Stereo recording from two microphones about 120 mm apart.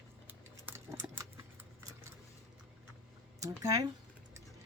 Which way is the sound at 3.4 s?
30° right (ahead or behind).